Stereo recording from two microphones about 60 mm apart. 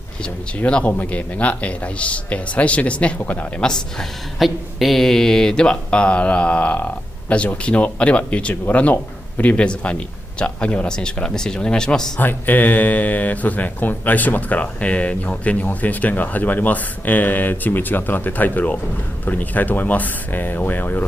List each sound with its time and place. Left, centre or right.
0.6 s speech: left
4.4 s speech: centre
12.2 s speech: left